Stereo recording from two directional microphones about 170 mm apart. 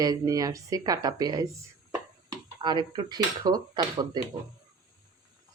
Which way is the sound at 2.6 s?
25° right (ahead or behind).